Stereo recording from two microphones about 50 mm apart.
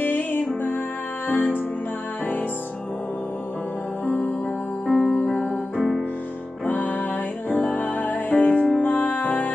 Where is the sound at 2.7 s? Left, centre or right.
Left.